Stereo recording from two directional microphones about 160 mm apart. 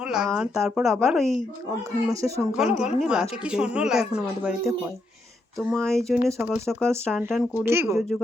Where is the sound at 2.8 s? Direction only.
5° right (ahead or behind).